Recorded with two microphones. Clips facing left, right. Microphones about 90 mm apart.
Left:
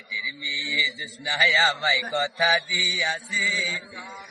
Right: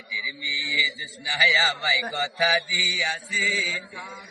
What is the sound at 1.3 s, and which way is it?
A man's voice, 35° left (ahead or behind).